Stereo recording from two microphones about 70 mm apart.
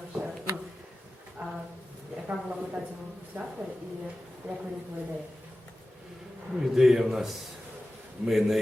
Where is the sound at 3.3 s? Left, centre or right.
Right.